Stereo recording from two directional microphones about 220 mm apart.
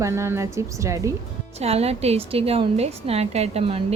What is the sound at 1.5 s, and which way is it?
A woman's voice, 30° right (ahead or behind).